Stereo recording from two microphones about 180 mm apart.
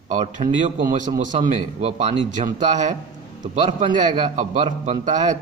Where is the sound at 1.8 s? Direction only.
30° right (ahead or behind).